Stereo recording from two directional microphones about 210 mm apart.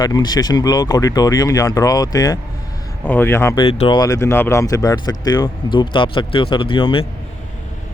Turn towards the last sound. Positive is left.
turn(degrees=25)  # may be behind; listen again after turning